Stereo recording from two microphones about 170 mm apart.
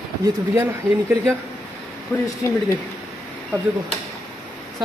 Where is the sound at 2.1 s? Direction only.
10° left (ahead or behind).